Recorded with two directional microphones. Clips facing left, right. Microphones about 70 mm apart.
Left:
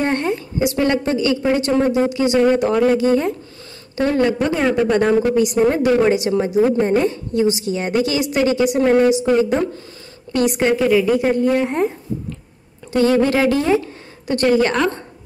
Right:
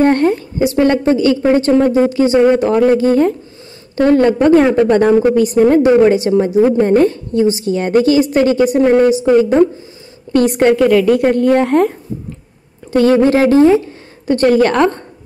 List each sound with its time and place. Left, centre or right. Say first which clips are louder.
0.0 s speech: right 8 dB; right
6.9 s a woman's voice: right 6 dB; right
7.3 s speech: right 4 dB; right
10.3 s a woman's voice: right 6 dB; right
12.9 s speech: right 5 dB; right